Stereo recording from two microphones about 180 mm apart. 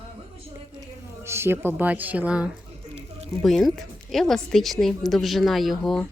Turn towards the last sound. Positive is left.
turn(degrees=0)  # may be behind; listen again after turning